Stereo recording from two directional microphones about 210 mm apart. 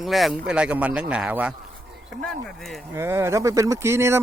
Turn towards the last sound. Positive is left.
turn(degrees=-10)  # may be behind; listen again after turning